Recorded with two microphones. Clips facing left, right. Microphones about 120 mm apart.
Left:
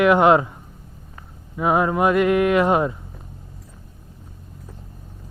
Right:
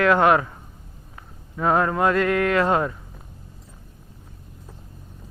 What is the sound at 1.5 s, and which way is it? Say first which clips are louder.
Speech: left 1 dB; 10° left (ahead or behind).